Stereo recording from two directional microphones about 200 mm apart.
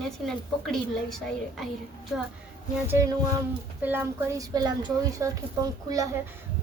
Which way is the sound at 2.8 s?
15° right (ahead or behind).